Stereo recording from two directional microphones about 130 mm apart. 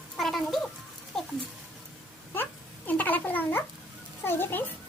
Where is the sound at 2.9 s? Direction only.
15° left (ahead or behind).